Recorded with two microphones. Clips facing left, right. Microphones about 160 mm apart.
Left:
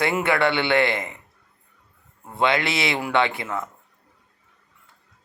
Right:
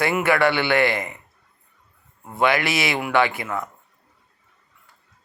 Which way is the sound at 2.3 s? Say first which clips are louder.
Right 1 dB; 25° left (ahead or behind).